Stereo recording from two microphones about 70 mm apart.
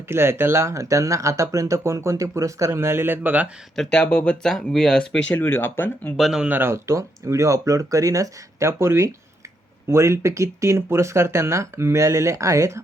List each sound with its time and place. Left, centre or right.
0.1 s speech: right
3.9 s speech: centre
5.3 s speech: left
6.1 s speech: centre
6.5 s speech: right